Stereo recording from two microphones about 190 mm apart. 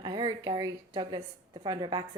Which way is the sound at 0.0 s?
20° right (ahead or behind).